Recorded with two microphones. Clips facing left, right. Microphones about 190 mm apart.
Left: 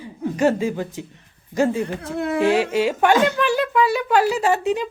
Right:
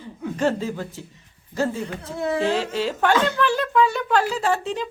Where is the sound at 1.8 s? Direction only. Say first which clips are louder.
Left 3 dB; 55° left (ahead or behind).